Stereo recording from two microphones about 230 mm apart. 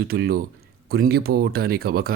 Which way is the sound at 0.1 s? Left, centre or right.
Right.